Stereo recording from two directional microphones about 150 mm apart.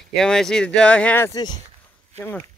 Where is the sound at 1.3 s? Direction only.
25° left (ahead or behind).